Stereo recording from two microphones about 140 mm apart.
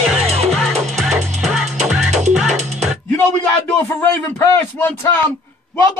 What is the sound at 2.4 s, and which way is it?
Music, 55° right (ahead or behind).